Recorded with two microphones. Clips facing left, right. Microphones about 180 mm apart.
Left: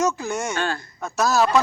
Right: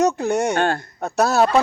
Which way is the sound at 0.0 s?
65° right (ahead or behind).